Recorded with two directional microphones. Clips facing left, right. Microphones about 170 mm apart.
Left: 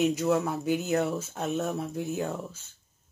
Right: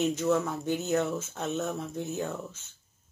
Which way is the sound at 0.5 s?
10° left (ahead or behind).